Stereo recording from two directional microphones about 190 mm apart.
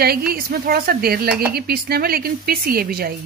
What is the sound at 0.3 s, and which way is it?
Speech, 50° right (ahead or behind).